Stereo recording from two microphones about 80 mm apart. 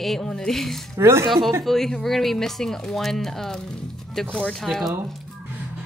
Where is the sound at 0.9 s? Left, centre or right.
Right.